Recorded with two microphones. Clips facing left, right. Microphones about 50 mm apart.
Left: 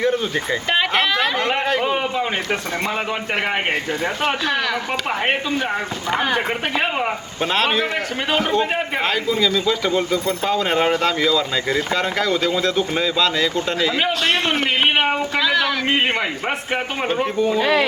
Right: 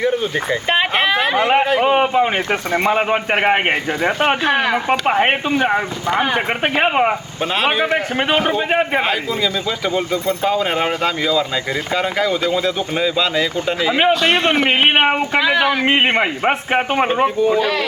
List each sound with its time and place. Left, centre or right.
0.0 s speech: centre
0.7 s a sound: right
1.8 s speech: right
6.7 s speech: right
7.6 s speech: centre
14.1 s speech: right
17.2 s speech: centre
17.6 s speech: centre